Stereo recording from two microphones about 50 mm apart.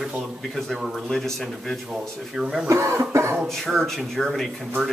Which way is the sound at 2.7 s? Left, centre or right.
Right.